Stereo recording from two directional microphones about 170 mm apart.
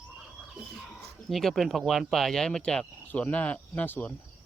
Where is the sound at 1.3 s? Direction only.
Centre (ahead or behind).